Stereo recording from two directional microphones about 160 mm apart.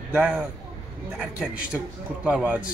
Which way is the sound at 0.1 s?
10° right (ahead or behind).